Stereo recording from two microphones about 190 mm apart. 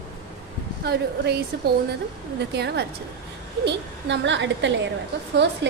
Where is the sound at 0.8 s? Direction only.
60° right (ahead or behind).